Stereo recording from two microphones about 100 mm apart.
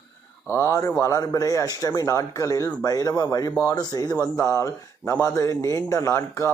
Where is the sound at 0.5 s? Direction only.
30° left (ahead or behind).